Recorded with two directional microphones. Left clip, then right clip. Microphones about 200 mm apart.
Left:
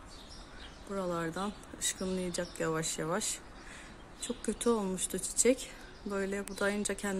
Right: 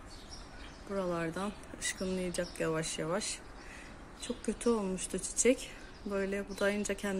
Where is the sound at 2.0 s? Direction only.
15° left (ahead or behind).